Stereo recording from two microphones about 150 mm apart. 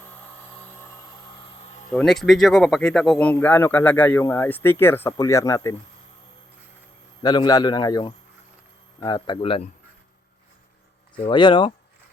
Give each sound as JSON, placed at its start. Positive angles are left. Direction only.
{"t": 1.9, "sound": "speech", "side_deg": 5}
{"t": 7.2, "sound": "a man's voice", "side_deg": 25}
{"t": 11.2, "sound": "speech", "side_deg": 30}